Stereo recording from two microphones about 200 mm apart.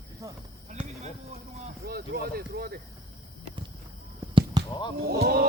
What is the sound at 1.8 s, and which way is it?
Speech, 50° right (ahead or behind).